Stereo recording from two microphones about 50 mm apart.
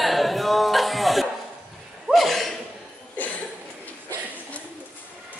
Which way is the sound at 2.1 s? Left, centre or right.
Centre.